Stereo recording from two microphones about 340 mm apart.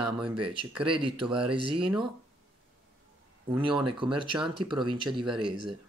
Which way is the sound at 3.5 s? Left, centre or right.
Centre.